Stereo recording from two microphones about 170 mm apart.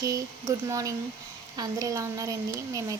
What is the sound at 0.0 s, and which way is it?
A woman's voice, 20° right (ahead or behind).